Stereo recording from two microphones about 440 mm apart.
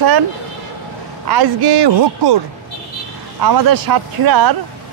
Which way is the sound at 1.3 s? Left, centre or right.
Right.